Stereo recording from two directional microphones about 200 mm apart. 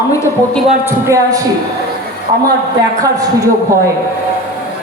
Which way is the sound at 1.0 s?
15° right (ahead or behind).